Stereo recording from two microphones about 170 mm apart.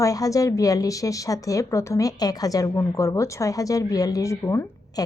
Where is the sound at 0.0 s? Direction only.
20° left (ahead or behind).